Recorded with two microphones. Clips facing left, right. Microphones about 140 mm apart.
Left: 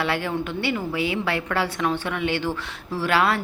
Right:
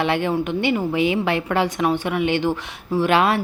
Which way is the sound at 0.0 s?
20° right (ahead or behind).